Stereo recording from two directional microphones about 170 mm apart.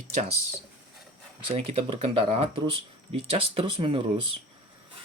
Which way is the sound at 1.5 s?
35° right (ahead or behind).